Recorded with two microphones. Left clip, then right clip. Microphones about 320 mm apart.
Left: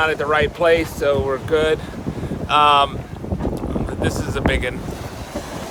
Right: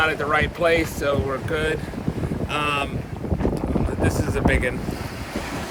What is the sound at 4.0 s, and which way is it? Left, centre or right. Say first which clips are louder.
Speech: left 2 dB; centre.